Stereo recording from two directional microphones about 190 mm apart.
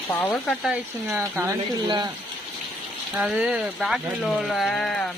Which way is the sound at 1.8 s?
20° right (ahead or behind).